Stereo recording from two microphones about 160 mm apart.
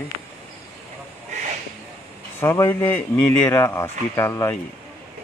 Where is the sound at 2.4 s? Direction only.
15° left (ahead or behind).